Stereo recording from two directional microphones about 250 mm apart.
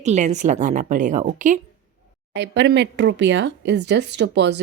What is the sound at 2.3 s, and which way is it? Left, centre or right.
Speech, right.